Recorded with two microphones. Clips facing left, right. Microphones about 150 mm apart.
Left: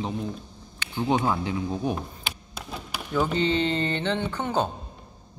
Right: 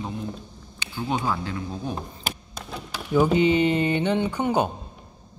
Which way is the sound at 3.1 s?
10° right (ahead or behind).